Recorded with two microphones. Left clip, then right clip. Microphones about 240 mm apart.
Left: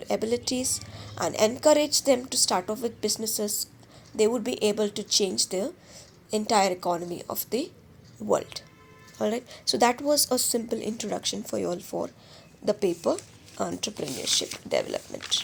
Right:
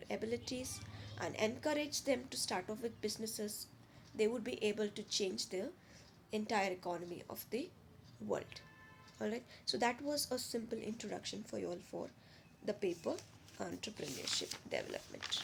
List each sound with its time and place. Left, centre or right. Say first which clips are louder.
0.0 s a woman's voice: left 14 dB; left